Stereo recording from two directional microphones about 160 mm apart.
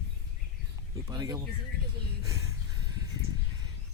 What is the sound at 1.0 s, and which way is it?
Speech, 20° right (ahead or behind).